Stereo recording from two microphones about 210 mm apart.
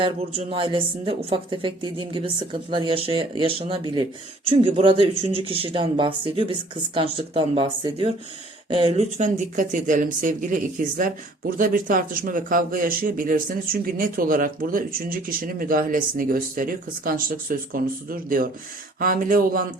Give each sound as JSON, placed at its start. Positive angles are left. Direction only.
{"t": 0.0, "sound": "speech", "side_deg": -25}